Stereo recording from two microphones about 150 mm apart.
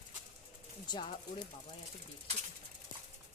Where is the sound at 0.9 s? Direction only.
30° left (ahead or behind).